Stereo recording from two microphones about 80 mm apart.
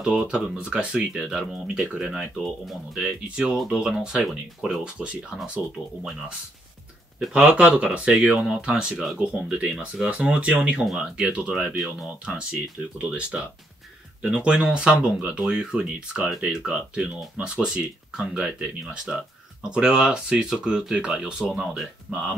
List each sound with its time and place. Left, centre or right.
0.0 s speech: centre
1.2 s speech: centre
7.2 s speech: centre